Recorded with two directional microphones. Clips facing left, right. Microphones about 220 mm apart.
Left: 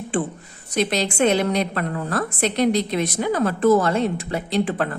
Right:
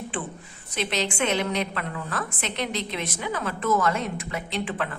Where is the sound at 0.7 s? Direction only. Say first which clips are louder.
Left 6 dB; 40° left (ahead or behind).